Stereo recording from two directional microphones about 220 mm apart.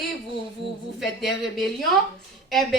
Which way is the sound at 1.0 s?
Centre (ahead or behind).